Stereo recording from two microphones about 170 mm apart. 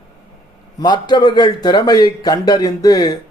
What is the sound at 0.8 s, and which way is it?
A man's voice, 25° left (ahead or behind).